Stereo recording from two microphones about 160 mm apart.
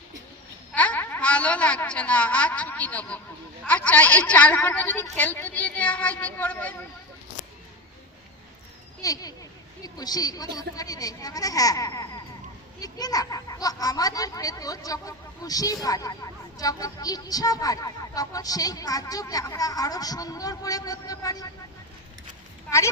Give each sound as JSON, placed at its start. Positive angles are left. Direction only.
{"t": 0.7, "sound": "a woman's voice", "side_deg": 10}
{"t": 9.0, "sound": "speech", "side_deg": 20}